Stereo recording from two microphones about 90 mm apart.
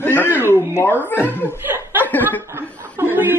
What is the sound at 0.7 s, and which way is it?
Speech, 25° left (ahead or behind).